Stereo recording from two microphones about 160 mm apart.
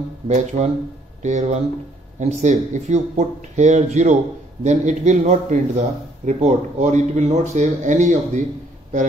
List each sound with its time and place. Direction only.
0.3 s speech: 50° right (ahead or behind)